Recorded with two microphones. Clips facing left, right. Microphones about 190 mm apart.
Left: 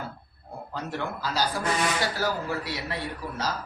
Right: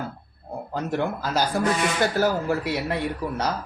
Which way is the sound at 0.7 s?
50° right (ahead or behind).